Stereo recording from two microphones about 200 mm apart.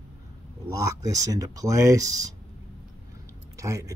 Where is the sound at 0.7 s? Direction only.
15° right (ahead or behind).